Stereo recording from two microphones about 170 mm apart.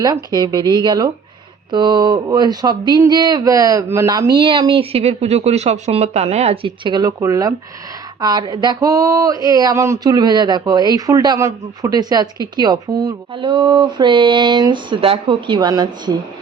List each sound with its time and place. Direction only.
0.0 s speech: 25° right (ahead or behind)